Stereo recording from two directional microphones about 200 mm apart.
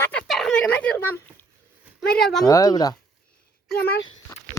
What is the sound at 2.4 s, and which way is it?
Speech, 20° left (ahead or behind).